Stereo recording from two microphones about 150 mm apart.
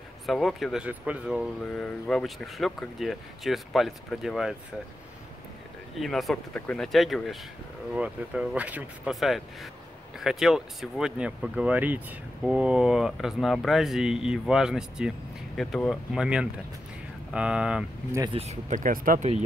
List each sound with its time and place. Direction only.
0.3 s speech: centre (ahead or behind)
1.6 s speech: 5° left (ahead or behind)
5.9 s speech: centre (ahead or behind)
18.3 s speech: 45° right (ahead or behind); by 19.2 s 60° right (ahead or behind)